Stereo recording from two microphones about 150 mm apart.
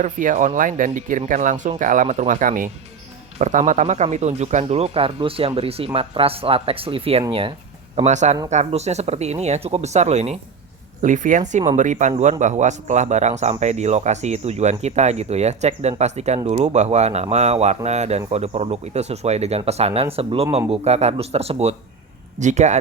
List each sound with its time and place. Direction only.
0.0 s speech: 60° right (ahead or behind)
3.3 s speech: 50° right (ahead or behind); by 7.5 s 35° right (ahead or behind)
7.9 s speech: 50° right (ahead or behind)